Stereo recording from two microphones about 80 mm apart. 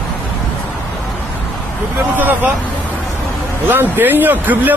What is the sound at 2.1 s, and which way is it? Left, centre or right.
Speech, right.